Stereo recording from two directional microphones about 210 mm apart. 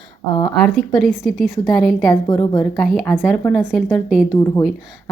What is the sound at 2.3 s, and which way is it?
Speech, 20° left (ahead or behind).